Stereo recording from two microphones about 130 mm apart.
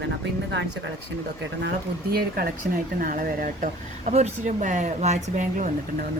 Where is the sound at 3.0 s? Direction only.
90° right.